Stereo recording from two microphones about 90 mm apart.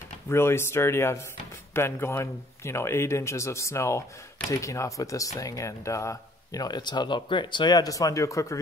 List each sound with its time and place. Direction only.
0.3 s speech: 30° left (ahead or behind)